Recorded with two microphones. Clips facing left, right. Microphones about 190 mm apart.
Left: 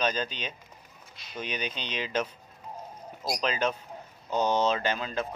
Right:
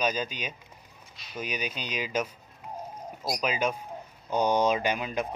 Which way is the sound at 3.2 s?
10° right (ahead or behind).